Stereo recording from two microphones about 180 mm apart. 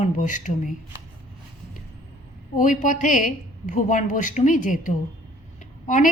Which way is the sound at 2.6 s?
45° left (ahead or behind).